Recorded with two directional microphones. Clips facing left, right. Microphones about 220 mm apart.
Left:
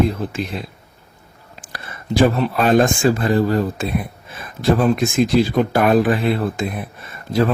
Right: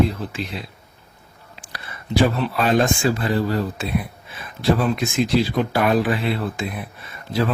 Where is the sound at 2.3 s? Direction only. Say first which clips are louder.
Left 4 dB; 45° left (ahead or behind).